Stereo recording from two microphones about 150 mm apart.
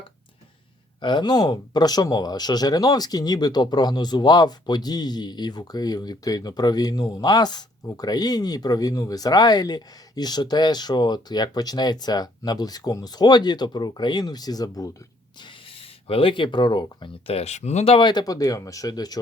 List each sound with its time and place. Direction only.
1.0 s speech: 30° left (ahead or behind)
15.4 s speech: 35° left (ahead or behind)